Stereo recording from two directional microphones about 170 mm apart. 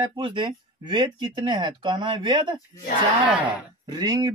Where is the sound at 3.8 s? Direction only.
25° right (ahead or behind).